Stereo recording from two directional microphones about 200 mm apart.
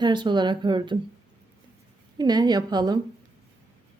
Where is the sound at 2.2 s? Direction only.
20° right (ahead or behind).